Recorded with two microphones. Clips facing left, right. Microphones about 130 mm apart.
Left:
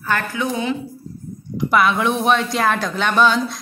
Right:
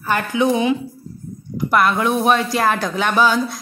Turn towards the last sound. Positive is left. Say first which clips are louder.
# even
turn(degrees=-5)  # may be behind; listen again after turning